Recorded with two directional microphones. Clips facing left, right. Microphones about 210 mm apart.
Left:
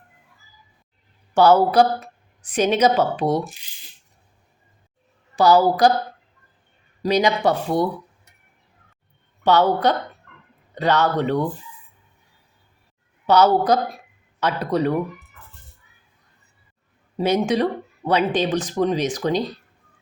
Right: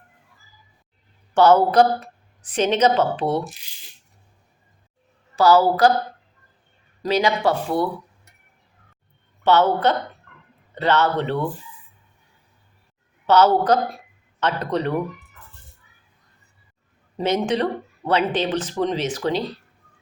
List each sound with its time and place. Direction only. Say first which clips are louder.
1.3 s speech: even; 10° left (ahead or behind)
5.4 s speech: even; 15° left (ahead or behind)
7.0 s speech: left 1 dB; 15° left (ahead or behind)
9.4 s speech: even; 15° left (ahead or behind)
13.2 s speech: even; 10° left (ahead or behind)
17.2 s speech: left 2 dB; 10° left (ahead or behind)